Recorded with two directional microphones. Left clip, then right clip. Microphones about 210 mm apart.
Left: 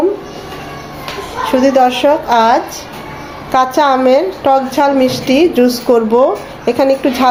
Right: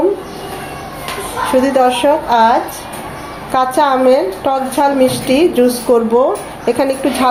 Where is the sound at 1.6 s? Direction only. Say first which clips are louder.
Left 2 dB; 20° left (ahead or behind).